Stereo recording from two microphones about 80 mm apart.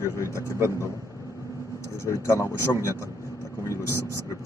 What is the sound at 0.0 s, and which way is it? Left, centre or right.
Speech, left.